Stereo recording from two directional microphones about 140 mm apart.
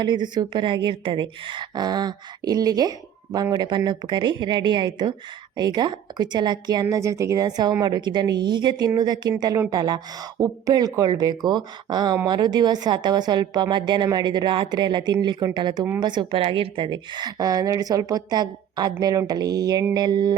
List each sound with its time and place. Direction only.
0.0 s a woman's voice: 30° right (ahead or behind)